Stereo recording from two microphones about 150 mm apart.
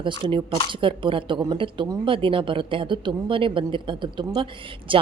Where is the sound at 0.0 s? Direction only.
35° right (ahead or behind).